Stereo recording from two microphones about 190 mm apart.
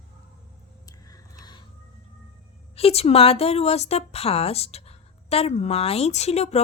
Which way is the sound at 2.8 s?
30° left (ahead or behind).